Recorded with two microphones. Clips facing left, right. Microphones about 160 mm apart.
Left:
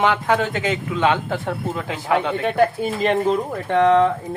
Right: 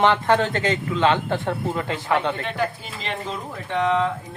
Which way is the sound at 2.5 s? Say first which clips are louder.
Left 8 dB; 50° left (ahead or behind).